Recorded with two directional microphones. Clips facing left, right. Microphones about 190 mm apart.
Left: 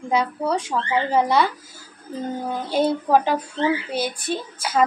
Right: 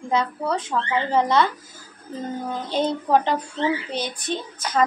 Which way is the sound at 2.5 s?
10° left (ahead or behind).